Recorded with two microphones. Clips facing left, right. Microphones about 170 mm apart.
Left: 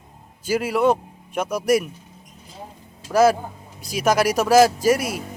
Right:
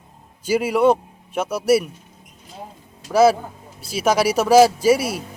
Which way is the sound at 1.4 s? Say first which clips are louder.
Right 1 dB; 10° left (ahead or behind).